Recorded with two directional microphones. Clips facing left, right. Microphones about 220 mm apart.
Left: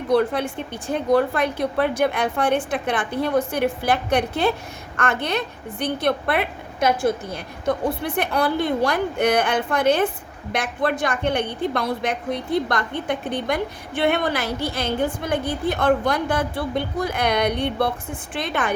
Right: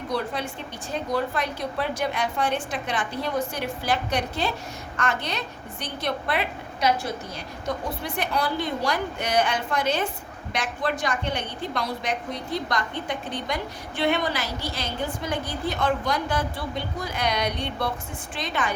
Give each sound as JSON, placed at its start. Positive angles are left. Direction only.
{"t": 0.1, "sound": "a woman's voice", "side_deg": 55}